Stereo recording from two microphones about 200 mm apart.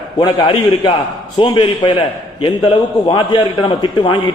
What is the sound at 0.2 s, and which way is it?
A man's voice, 20° left (ahead or behind).